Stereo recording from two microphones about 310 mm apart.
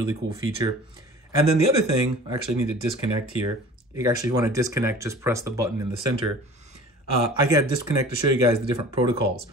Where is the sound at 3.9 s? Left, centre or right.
Centre.